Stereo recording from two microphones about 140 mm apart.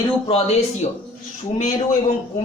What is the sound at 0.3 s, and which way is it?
Speech, 45° left (ahead or behind).